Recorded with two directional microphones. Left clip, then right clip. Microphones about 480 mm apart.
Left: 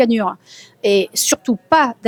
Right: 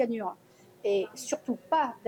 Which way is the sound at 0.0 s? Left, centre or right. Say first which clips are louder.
Left 14 dB; left.